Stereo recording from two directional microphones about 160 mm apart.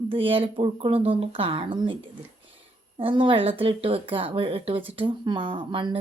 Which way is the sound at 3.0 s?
35° right (ahead or behind).